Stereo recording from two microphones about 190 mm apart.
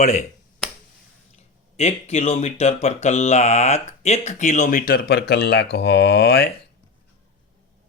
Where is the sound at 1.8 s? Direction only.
35° left (ahead or behind); by 6.5 s 60° left (ahead or behind).